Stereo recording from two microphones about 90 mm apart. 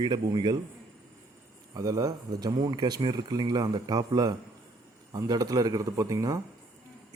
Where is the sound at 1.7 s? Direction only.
40° right (ahead or behind).